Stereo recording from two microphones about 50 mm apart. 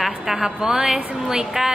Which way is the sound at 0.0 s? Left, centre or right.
Centre.